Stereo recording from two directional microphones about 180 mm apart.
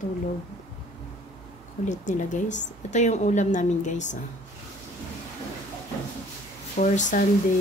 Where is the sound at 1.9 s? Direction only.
45° left (ahead or behind).